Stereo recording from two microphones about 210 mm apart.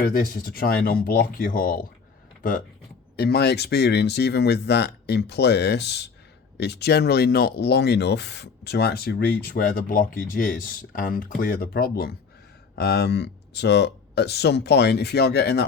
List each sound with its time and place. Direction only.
0.0 s speech: 45° left (ahead or behind)